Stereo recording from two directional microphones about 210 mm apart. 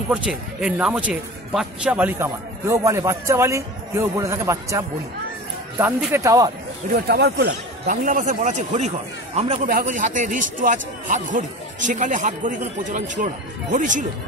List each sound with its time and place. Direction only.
0.1 s speech: 5° right (ahead or behind)
6.9 s speech: 50° right (ahead or behind)